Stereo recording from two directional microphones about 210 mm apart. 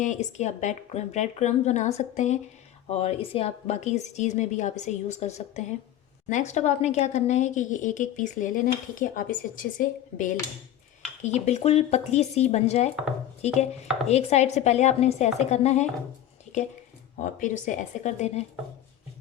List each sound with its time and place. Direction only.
0.0 s speech: 35° left (ahead or behind)
17.2 s speech: 35° left (ahead or behind)